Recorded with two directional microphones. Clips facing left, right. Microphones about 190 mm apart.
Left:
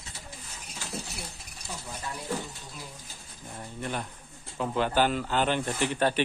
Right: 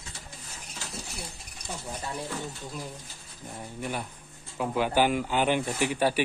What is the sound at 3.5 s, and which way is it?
Speech, 10° right (ahead or behind).